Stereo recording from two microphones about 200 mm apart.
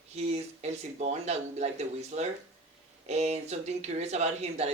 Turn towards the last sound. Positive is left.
turn(degrees=-35)  # may be behind; listen again after turning